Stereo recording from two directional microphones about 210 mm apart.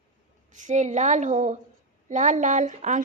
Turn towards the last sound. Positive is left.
turn(degrees=-35)  # may be behind; listen again after turning